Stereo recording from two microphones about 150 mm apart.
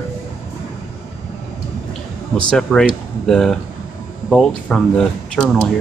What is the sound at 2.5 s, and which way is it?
Speech, 5° left (ahead or behind).